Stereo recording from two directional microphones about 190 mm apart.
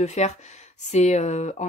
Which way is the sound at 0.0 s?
35° left (ahead or behind).